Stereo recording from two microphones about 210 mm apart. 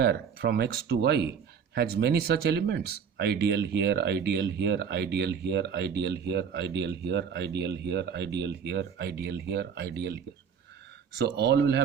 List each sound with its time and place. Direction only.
0.0 s speech: 50° right (ahead or behind)
11.3 s speech: 55° right (ahead or behind)